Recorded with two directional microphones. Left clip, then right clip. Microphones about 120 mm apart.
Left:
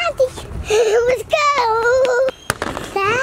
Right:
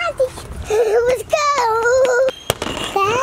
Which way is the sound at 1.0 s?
10° left (ahead or behind).